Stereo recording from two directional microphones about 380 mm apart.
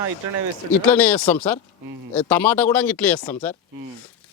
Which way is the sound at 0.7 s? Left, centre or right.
Centre.